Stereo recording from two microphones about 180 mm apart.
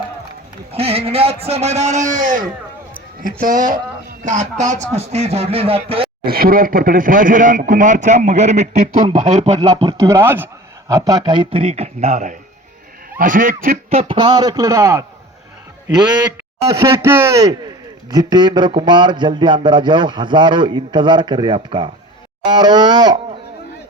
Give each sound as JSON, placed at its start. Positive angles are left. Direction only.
{"t": 0.7, "sound": "speech", "side_deg": -35}
{"t": 6.2, "sound": "speech", "side_deg": -55}
{"t": 9.8, "sound": "a man's voice", "side_deg": -15}
{"t": 13.9, "sound": "a man's voice", "side_deg": -30}
{"t": 16.6, "sound": "a man's voice", "side_deg": -15}